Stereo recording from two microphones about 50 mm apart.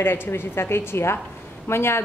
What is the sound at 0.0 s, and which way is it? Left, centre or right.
A woman's voice, left.